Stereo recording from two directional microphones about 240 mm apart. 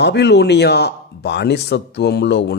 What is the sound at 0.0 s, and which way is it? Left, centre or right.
A man's voice, left.